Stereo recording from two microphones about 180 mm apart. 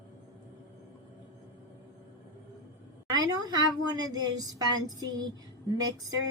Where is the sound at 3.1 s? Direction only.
20° right (ahead or behind).